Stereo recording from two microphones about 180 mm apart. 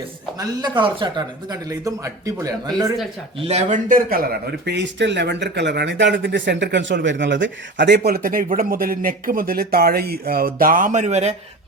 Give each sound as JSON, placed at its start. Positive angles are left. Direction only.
{"t": 0.3, "sound": "speech", "side_deg": -25}
{"t": 3.4, "sound": "a man's voice", "side_deg": -35}
{"t": 3.8, "sound": "speech", "side_deg": -50}